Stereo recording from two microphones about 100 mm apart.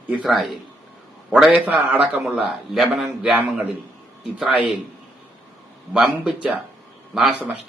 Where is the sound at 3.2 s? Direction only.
15° right (ahead or behind).